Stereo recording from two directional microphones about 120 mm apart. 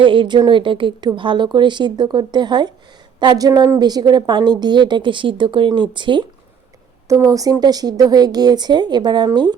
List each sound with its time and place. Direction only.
0.0 s a woman's voice: 45° right (ahead or behind)
7.1 s a woman's voice: 30° right (ahead or behind)